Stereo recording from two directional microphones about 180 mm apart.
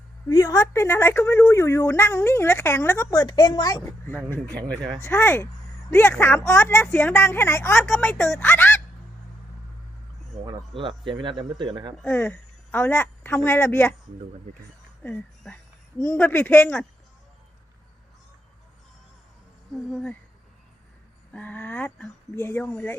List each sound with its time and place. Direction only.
0.3 s a woman's voice: 20° left (ahead or behind)
10.4 s speech: 30° right (ahead or behind)
12.0 s a woman's voice: 10° left (ahead or behind)
15.0 s a woman's voice: 10° left (ahead or behind)
19.7 s a sound: centre (ahead or behind)
21.3 s a woman's voice: 10° left (ahead or behind)